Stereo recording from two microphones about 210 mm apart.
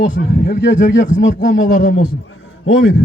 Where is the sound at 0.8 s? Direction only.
40° left (ahead or behind).